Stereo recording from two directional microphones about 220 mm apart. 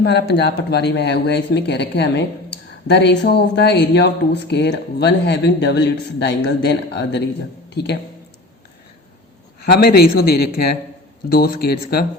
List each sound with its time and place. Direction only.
0.0 s speech: 50° left (ahead or behind)
9.8 s speech: 45° left (ahead or behind)